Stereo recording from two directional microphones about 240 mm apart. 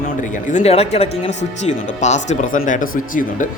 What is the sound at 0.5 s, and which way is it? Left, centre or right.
Speech, left.